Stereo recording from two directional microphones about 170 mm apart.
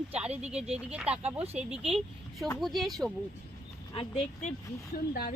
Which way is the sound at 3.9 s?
30° left (ahead or behind).